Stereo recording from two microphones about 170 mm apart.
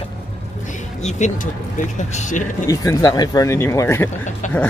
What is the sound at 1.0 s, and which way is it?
Speech, 45° left (ahead or behind).